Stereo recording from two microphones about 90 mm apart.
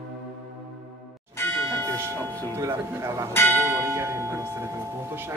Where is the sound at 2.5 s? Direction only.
35° right (ahead or behind).